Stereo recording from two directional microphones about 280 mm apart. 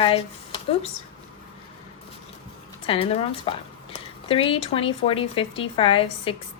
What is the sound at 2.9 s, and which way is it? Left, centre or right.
Speech, left.